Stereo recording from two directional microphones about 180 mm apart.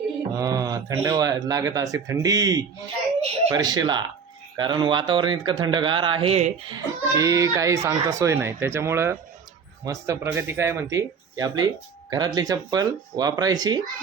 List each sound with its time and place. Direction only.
0.3 s speech: 20° right (ahead or behind)
6.7 s a child's voice: 20° right (ahead or behind)